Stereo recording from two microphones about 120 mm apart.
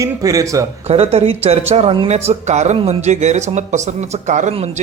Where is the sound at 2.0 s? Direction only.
65° right (ahead or behind).